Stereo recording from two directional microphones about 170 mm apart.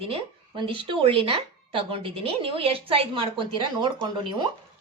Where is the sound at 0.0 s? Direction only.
30° right (ahead or behind).